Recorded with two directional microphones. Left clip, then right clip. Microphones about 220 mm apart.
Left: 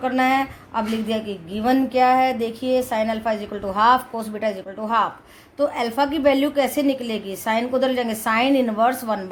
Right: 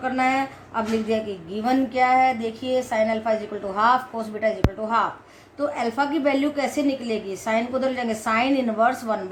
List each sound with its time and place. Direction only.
0.0 s a woman's voice: 45° left (ahead or behind)